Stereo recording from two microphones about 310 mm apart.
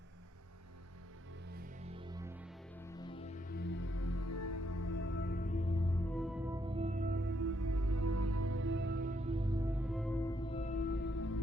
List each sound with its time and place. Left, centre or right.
1.5 s music: centre
2.8 s music: centre; by 5.0 s left
5.0 s music: left; by 6.0 s centre
6.1 s music: centre; by 7.5 s right
7.5 s music: right; by 11.3 s left